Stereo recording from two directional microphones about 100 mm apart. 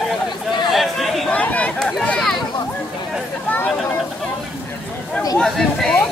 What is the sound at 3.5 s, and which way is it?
Speech, 15° left (ahead or behind).